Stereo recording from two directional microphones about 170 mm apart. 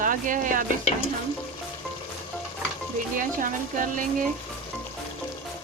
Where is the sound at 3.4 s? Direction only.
50° right (ahead or behind).